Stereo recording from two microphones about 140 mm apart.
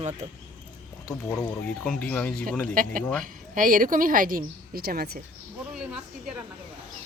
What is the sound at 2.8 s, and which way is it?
A woman's voice, 80° right.